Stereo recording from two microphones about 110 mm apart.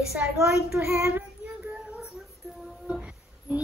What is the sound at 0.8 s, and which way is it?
Child singing, 20° right (ahead or behind).